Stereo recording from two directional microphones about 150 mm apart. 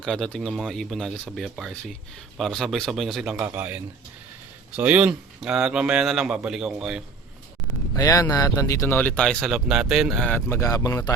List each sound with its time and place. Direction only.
0.0 s a man's voice: 5° left (ahead or behind)
7.9 s speech: 20° left (ahead or behind)
10.6 s speech: 20° left (ahead or behind)